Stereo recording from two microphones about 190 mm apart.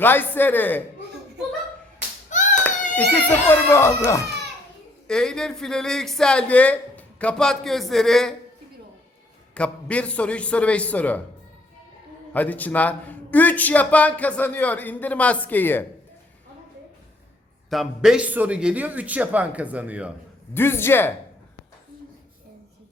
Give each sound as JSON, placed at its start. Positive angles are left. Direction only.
{"t": 0.0, "sound": "a man's voice", "side_deg": 10}
{"t": 2.3, "sound": "a sound", "side_deg": 40}
{"t": 3.1, "sound": "a man's voice", "side_deg": 10}
{"t": 5.0, "sound": "speech", "side_deg": 5}
{"t": 9.6, "sound": "a man's voice", "side_deg": 5}
{"t": 12.3, "sound": "a man's voice", "side_deg": 10}
{"t": 17.7, "sound": "a man's voice", "side_deg": 0}
{"t": 20.5, "sound": "a man's voice", "side_deg": 10}